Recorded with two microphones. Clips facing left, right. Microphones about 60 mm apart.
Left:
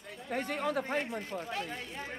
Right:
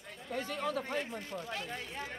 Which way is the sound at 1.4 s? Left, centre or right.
Centre.